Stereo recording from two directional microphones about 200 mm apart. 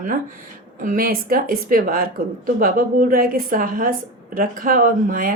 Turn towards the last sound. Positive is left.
turn(degrees=-45)  # may be behind; listen again after turning